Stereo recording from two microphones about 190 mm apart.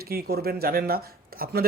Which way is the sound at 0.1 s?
55° right (ahead or behind).